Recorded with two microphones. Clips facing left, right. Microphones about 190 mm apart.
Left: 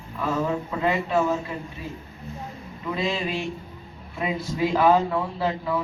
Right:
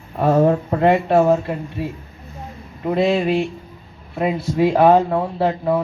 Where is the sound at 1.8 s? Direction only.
65° right (ahead or behind).